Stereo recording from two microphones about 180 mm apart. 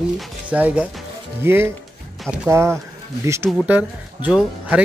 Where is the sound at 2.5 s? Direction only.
15° right (ahead or behind).